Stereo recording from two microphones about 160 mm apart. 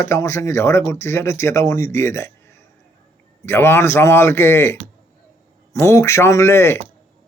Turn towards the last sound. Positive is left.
turn(degrees=15)  # may be behind; listen again after turning